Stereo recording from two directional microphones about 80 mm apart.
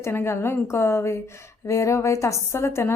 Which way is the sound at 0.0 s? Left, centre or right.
Left.